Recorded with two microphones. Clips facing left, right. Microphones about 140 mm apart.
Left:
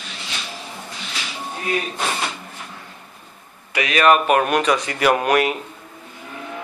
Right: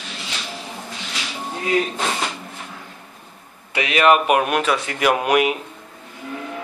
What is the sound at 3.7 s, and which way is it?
Speech, 20° right (ahead or behind).